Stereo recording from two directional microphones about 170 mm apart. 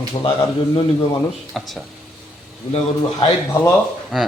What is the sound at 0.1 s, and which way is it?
Speech, 30° left (ahead or behind).